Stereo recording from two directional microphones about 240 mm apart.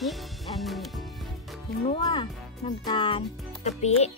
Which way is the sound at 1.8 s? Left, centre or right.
Left.